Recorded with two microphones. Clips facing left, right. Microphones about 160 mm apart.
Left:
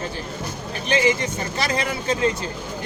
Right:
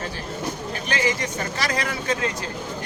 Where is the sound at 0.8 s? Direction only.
25° left (ahead or behind).